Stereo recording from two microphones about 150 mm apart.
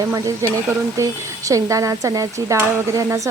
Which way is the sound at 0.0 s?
20° right (ahead or behind).